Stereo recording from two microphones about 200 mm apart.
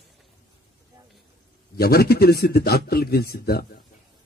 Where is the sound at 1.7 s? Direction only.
50° left (ahead or behind).